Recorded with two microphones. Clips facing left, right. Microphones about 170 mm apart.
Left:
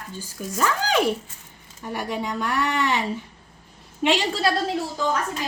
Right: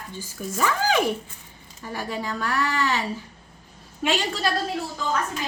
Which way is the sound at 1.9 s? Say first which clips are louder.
Left 2 dB; 15° left (ahead or behind).